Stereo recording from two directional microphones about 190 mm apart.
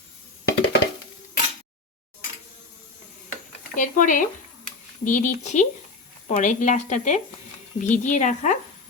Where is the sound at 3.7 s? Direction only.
40° left (ahead or behind).